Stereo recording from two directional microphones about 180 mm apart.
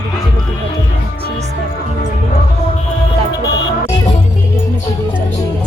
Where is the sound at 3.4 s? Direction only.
20° left (ahead or behind).